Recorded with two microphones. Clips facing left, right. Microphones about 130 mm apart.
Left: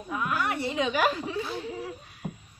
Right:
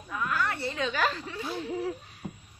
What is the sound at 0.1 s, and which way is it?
Chuckle, 15° left (ahead or behind).